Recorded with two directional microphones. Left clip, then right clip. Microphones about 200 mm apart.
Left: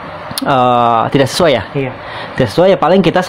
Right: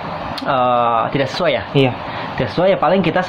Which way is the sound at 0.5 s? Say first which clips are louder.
Left 5 dB; 55° left (ahead or behind).